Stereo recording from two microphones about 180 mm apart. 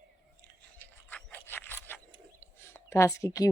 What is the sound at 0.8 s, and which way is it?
Zipper, 10° left (ahead or behind).